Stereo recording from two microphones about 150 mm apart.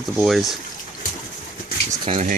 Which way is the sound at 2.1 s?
50° right (ahead or behind).